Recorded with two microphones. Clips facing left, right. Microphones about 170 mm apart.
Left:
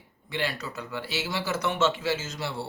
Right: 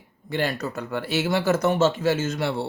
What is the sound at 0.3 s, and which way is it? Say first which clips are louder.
A man's voice: right 6 dB; 45° right (ahead or behind).